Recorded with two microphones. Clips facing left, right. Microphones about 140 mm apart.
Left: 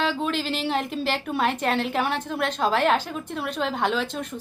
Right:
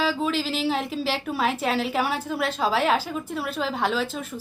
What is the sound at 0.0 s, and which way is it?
A woman's voice, centre (ahead or behind).